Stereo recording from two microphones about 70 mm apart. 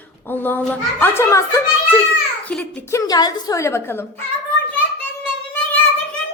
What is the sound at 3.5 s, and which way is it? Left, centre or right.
Speech, left.